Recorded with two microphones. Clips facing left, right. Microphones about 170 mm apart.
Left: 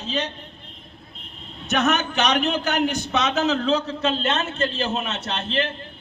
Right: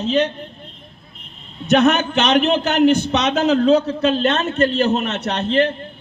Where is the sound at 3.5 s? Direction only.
40° right (ahead or behind).